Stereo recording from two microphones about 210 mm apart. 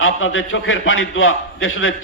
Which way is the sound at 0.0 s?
70° left (ahead or behind).